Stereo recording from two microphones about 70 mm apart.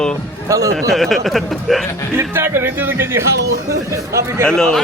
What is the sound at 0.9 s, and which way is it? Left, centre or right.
Speech, centre.